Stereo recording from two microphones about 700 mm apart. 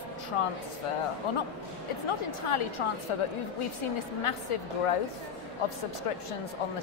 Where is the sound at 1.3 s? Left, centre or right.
Left.